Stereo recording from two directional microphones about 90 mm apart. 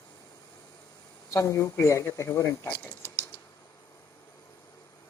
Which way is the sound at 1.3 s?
35° left (ahead or behind).